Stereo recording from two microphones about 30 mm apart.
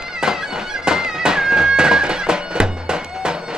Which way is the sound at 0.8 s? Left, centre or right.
Right.